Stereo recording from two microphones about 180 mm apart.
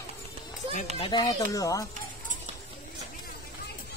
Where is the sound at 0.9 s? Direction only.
25° left (ahead or behind).